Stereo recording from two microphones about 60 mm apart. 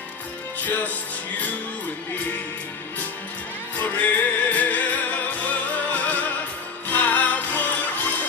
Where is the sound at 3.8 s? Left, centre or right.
Left.